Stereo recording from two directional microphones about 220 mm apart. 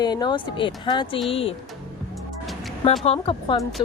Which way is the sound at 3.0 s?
25° left (ahead or behind).